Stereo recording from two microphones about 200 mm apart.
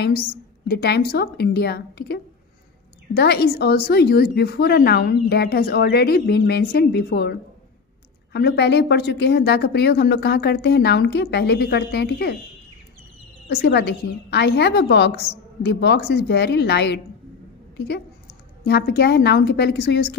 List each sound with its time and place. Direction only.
0.7 s a woman's voice: 55° left (ahead or behind)
3.2 s a woman's voice: 50° left (ahead or behind)
13.5 s a woman's voice: 55° left (ahead or behind)